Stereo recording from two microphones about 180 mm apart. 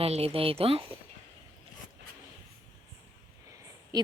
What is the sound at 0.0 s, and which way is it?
Speech, 35° right (ahead or behind).